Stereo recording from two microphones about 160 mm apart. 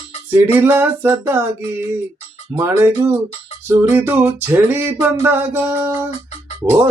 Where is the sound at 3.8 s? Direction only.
10° right (ahead or behind).